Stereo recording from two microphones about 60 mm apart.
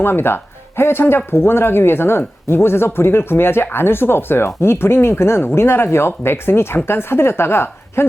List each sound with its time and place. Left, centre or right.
0.0 s speech: left